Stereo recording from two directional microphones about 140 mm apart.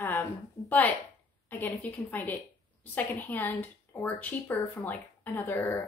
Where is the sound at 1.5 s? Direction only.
15° left (ahead or behind).